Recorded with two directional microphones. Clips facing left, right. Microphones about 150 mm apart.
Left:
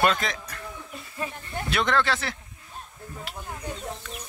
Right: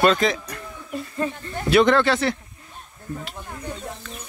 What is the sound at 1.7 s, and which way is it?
Speech, centre (ahead or behind).